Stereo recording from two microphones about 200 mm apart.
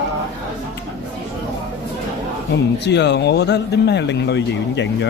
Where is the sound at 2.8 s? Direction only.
60° left (ahead or behind).